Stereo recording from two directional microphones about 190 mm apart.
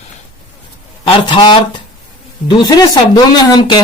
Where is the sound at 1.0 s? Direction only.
25° left (ahead or behind).